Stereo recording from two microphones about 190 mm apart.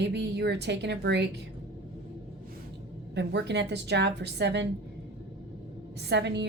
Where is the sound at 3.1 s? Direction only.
65° right (ahead or behind).